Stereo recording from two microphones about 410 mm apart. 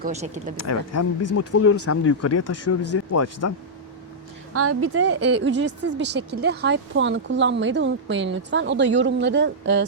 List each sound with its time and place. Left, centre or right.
0.0 s speech: centre
0.5 s speech: left
4.5 s a woman's voice: right